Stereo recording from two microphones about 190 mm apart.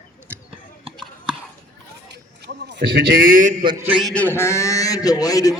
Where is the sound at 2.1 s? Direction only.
60° right (ahead or behind); by 3.5 s 45° right (ahead or behind).